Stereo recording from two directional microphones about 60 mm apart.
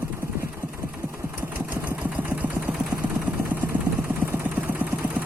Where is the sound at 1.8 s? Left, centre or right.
Right.